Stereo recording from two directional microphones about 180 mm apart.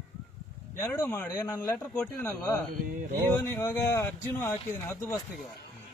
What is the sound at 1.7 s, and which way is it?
Speech, 5° left (ahead or behind).